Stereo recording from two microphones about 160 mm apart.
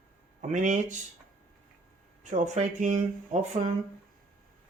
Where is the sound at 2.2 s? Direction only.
50° right (ahead or behind).